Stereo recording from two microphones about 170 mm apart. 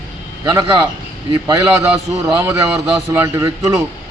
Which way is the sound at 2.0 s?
20° right (ahead or behind).